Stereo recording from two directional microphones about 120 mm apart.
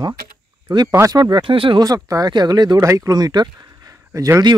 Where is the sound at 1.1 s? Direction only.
40° right (ahead or behind).